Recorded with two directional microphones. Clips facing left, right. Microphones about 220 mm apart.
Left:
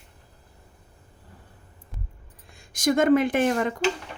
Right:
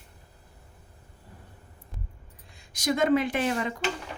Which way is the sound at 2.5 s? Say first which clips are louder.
Left 6 dB; 50° left (ahead or behind).